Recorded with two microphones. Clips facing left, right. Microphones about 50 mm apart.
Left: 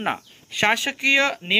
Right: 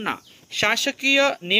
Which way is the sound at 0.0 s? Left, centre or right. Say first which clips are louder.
Left 2 dB; centre.